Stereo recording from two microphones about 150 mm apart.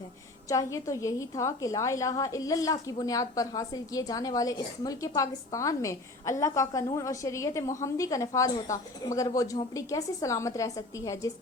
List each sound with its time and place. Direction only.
0.4 s a woman's voice: 20° left (ahead or behind)